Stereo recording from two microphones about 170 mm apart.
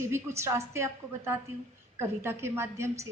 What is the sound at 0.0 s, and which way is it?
A woman's voice, 15° right (ahead or behind).